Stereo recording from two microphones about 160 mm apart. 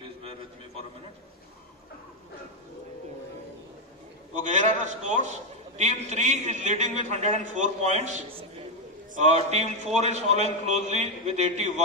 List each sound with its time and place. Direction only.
4.4 s a man's voice: 50° right (ahead or behind)